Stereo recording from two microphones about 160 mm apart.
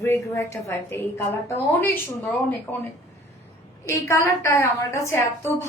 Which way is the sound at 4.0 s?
15° left (ahead or behind).